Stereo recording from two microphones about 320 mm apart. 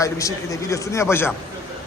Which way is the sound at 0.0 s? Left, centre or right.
Centre.